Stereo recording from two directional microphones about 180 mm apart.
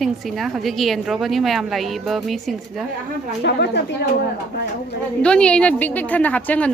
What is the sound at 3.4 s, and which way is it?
Speech, 70° left (ahead or behind).